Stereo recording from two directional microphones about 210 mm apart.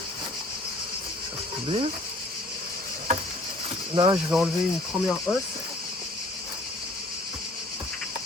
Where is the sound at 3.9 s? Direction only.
20° right (ahead or behind).